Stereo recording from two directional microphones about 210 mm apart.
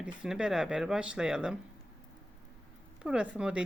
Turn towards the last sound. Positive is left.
turn(degrees=-5)  # may be behind; listen again after turning